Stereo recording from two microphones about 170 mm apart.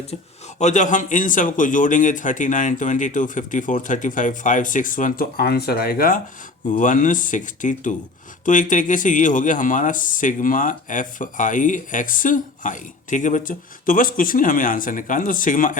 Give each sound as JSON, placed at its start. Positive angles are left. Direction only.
{"t": 0.6, "sound": "speech", "side_deg": 45}